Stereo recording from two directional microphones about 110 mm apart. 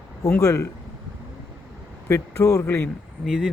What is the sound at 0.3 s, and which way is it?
Speech, 30° left (ahead or behind).